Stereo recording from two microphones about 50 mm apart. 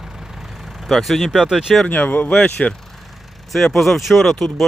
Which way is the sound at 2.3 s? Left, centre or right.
Centre.